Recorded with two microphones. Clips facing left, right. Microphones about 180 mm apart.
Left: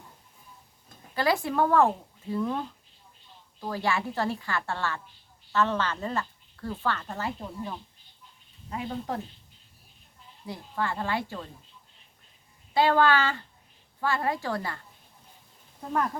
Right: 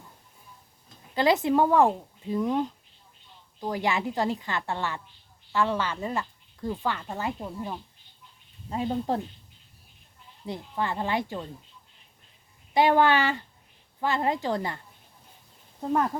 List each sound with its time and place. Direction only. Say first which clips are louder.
1.1 s speech: right 4 dB; 20° right (ahead or behind)
8.7 s speech: right 5 dB; 30° right (ahead or behind)
10.4 s speech: right 1 dB; 20° right (ahead or behind)
12.7 s speech: right 1 dB; 20° right (ahead or behind)